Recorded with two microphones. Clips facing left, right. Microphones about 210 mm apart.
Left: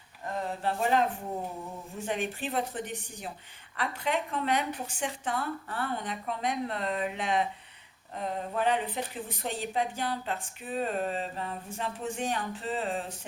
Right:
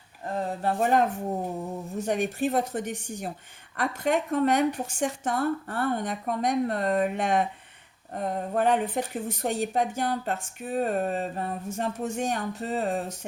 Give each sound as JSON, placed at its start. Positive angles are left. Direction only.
{"t": 0.6, "sound": "speech", "side_deg": -45}